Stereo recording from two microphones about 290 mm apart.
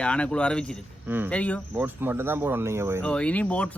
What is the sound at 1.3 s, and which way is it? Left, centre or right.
Speech, centre.